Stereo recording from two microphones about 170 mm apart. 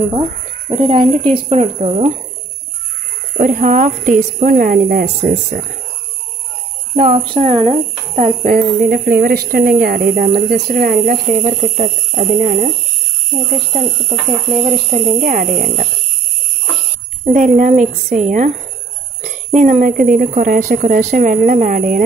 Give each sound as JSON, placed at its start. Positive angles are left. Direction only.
{"t": 0.1, "sound": "speech", "side_deg": -25}
{"t": 3.3, "sound": "speech", "side_deg": -50}
{"t": 7.0, "sound": "speech", "side_deg": -40}
{"t": 13.7, "sound": "speech", "side_deg": -30}
{"t": 15.0, "sound": "speech", "side_deg": -55}
{"t": 17.2, "sound": "speech", "side_deg": -50}